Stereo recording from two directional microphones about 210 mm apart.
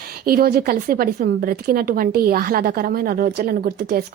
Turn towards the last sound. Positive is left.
turn(degrees=-45)  # may be behind; listen again after turning